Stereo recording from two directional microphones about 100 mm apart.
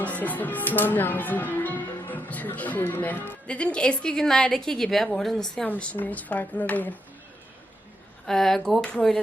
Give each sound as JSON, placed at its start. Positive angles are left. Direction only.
{"t": 0.0, "sound": "speech", "side_deg": 15}
{"t": 5.6, "sound": "speech", "side_deg": 15}
{"t": 8.3, "sound": "speech", "side_deg": 5}